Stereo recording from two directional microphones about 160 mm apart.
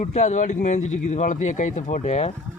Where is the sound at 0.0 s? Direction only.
45° left (ahead or behind).